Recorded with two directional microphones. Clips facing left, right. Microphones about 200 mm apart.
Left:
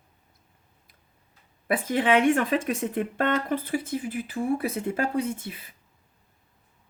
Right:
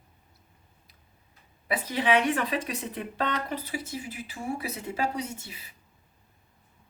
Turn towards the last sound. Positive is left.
turn(degrees=55)  # may be behind; listen again after turning